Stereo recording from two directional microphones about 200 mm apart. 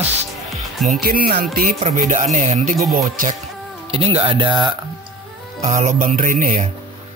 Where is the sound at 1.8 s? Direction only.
35° right (ahead or behind).